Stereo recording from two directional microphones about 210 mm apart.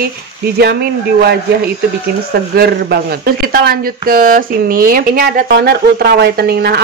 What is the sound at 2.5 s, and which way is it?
Speech, 50° right (ahead or behind).